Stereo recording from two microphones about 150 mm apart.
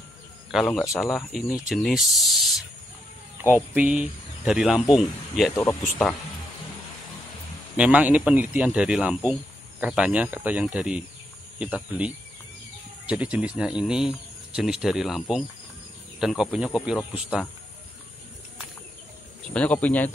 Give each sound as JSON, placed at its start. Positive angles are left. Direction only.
{"t": 0.5, "sound": "speech", "side_deg": 0}
{"t": 3.4, "sound": "speech", "side_deg": -10}
{"t": 5.5, "sound": "speech", "side_deg": 15}
{"t": 7.7, "sound": "speech", "side_deg": -10}
{"t": 19.5, "sound": "speech", "side_deg": 10}